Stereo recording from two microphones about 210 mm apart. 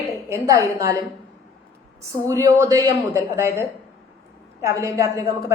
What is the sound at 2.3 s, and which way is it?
A woman's voice, 15° right (ahead or behind).